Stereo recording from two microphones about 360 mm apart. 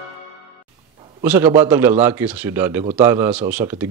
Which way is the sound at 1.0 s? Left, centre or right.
Centre.